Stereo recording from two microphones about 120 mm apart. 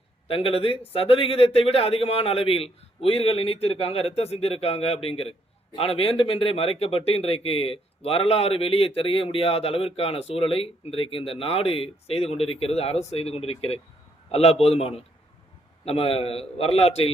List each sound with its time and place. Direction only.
0.3 s speech: 50° left (ahead or behind)